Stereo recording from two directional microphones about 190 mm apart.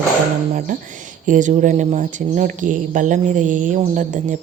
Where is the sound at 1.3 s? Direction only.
40° right (ahead or behind).